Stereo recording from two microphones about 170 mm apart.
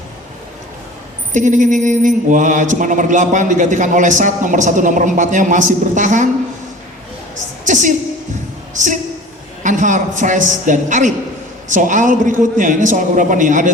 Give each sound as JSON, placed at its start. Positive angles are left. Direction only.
{"t": 1.3, "sound": "mantra", "side_deg": -45}
{"t": 7.3, "sound": "a sound", "side_deg": -45}
{"t": 8.7, "sound": "a woman's voice", "side_deg": -45}
{"t": 9.6, "sound": "mantra", "side_deg": -50}